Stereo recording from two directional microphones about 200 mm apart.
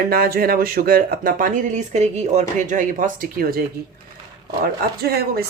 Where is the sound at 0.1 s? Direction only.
45° right (ahead or behind).